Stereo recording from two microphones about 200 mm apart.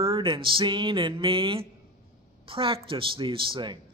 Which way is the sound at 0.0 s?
25° right (ahead or behind).